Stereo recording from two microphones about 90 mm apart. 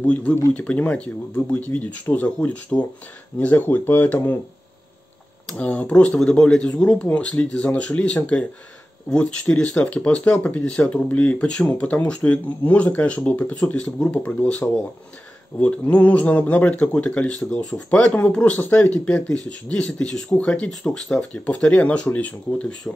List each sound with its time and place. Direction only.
0.0 s speech: 15° left (ahead or behind)
5.6 s speech: 15° left (ahead or behind)
15.6 s speech: 15° left (ahead or behind)